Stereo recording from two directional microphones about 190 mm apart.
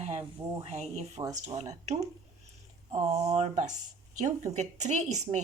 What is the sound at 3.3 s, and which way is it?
A woman's voice, 35° right (ahead or behind).